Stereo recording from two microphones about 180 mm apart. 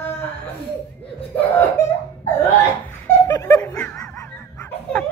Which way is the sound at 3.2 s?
20° left (ahead or behind).